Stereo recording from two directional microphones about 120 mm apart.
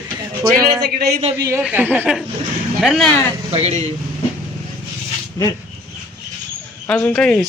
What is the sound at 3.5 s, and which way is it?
Speech, 55° right (ahead or behind).